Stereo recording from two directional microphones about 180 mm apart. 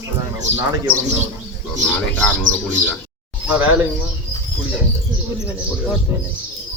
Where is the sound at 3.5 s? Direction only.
10° right (ahead or behind).